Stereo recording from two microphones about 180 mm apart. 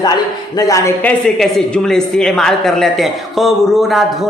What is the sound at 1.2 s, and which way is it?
Speech, centre (ahead or behind).